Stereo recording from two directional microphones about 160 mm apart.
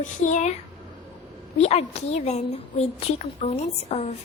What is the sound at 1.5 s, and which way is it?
A woman's voice, 40° left (ahead or behind).